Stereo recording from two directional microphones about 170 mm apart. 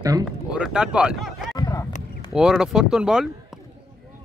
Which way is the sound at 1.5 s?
20° left (ahead or behind).